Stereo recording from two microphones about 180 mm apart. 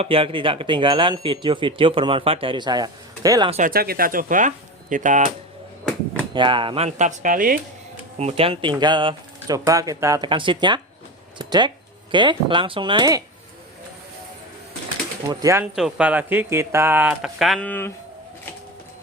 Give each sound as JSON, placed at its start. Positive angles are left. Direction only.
{"t": 0.0, "sound": "speech", "side_deg": -30}
{"t": 3.7, "sound": "speech", "side_deg": -55}
{"t": 6.3, "sound": "speech", "side_deg": -25}
{"t": 8.2, "sound": "speech", "side_deg": -35}
{"t": 15.3, "sound": "speech", "side_deg": -20}
{"t": 15.6, "sound": "speech", "side_deg": -5}